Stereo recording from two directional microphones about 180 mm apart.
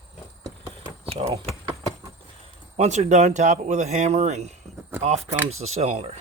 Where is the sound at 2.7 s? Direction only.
40° right (ahead or behind).